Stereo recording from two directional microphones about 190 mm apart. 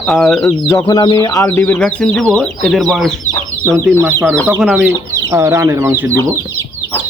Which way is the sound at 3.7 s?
15° right (ahead or behind).